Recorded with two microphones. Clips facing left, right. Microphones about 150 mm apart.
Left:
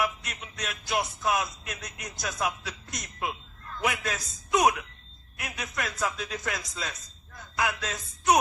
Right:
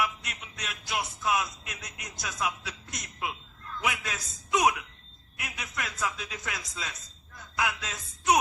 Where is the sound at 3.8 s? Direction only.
45° left (ahead or behind).